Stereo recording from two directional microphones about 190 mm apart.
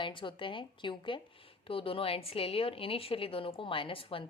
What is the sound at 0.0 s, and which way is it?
Speech, 25° left (ahead or behind).